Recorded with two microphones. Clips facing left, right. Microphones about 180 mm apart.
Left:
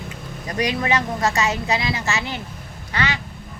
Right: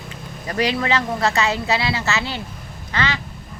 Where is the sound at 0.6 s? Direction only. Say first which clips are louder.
Right 1 dB; 15° left (ahead or behind).